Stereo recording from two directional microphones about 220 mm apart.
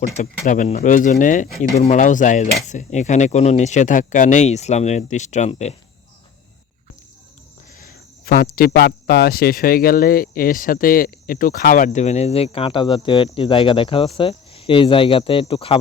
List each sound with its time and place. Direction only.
0.2 s speech: 35° left (ahead or behind)
7.9 s speech: 45° left (ahead or behind); by 15.8 s 25° left (ahead or behind)